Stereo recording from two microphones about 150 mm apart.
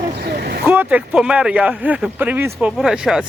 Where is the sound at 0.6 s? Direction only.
10° right (ahead or behind).